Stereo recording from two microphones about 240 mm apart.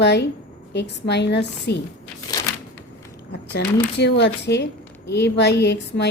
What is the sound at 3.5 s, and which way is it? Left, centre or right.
A woman's voice, left.